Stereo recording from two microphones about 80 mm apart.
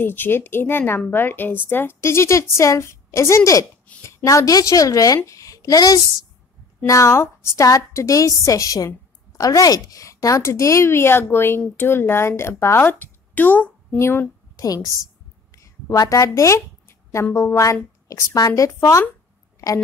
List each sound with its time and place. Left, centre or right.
0.0 s a woman's voice: left
14.6 s a woman's voice: left
18.0 s a woman's voice: left